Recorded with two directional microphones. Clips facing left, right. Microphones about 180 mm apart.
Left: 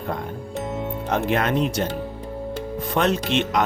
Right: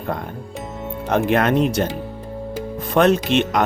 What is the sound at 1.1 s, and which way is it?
Speech, 55° right (ahead or behind).